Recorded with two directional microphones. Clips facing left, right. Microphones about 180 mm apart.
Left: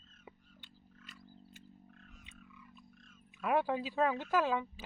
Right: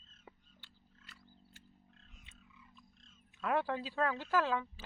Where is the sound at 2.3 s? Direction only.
25° right (ahead or behind).